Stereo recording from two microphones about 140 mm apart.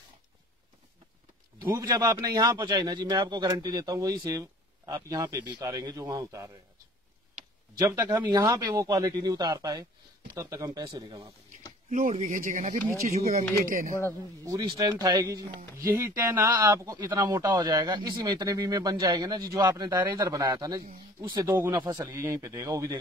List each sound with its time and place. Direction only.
1.7 s a man's voice: 25° right (ahead or behind)
7.8 s a man's voice: 25° right (ahead or behind)
11.9 s speech: 60° right (ahead or behind)
13.1 s speech: 55° right (ahead or behind)
13.7 s speech: 70° right (ahead or behind)
14.4 s a man's voice: 25° right (ahead or behind)
21.5 s a man's voice: 15° right (ahead or behind)